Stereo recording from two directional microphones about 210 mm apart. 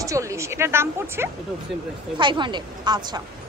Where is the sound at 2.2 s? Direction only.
20° right (ahead or behind).